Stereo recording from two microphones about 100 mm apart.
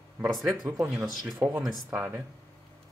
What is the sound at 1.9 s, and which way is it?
Speech, 15° right (ahead or behind).